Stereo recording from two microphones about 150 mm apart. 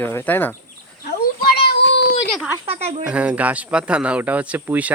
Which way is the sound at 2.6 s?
45° right (ahead or behind).